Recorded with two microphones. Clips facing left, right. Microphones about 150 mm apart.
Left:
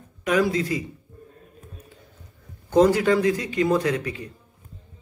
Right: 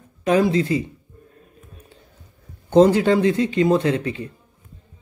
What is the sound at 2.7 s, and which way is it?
Speech, 25° right (ahead or behind).